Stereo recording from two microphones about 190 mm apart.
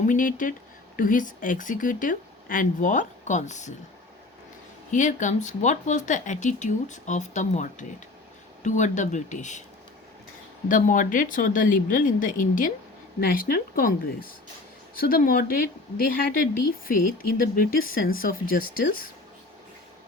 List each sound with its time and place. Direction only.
0.0 s speech: 45° left (ahead or behind)
4.9 s speech: 40° left (ahead or behind)
10.7 s speech: 45° left (ahead or behind)